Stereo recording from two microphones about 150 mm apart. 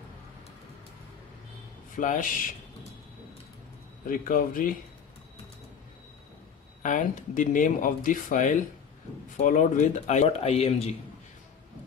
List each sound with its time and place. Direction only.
2.0 s speech: 60° left (ahead or behind)
4.1 s a man's voice: 65° left (ahead or behind)
6.8 s speech: 55° left (ahead or behind); by 10.9 s 40° left (ahead or behind)